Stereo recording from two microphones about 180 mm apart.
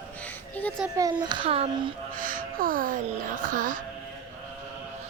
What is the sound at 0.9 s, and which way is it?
A child's voice, 20° right (ahead or behind).